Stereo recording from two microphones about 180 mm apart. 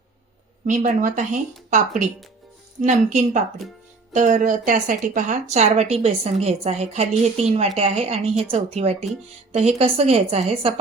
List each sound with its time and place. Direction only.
0.7 s a woman's voice: 45° right (ahead or behind)